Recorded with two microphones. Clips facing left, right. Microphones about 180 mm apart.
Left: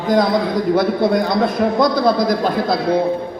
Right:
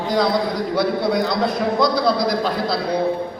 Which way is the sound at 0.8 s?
50° left (ahead or behind).